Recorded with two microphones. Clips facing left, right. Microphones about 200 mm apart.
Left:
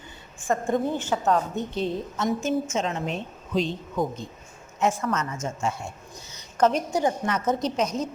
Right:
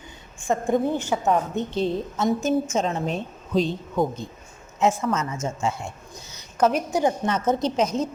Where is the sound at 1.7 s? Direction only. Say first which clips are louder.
Right 3 dB; 30° right (ahead or behind).